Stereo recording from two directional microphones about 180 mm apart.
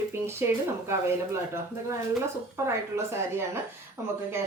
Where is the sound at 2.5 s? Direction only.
15° right (ahead or behind).